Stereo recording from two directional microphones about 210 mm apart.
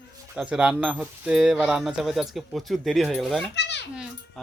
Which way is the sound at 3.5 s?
55° left (ahead or behind).